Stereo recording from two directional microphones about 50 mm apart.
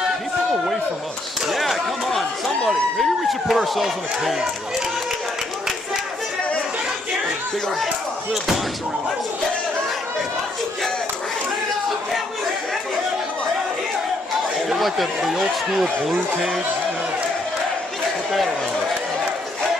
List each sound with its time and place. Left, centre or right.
1.5 s a sound: centre
3.0 s speech: centre
7.8 s speech: centre
14.7 s speech: centre